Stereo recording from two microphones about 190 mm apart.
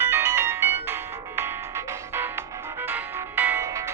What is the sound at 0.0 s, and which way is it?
Music, 10° right (ahead or behind).